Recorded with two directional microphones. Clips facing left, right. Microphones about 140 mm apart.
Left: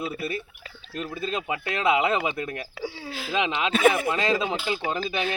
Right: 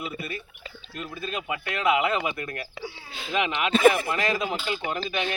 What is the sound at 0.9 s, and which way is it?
Speech, 25° left (ahead or behind).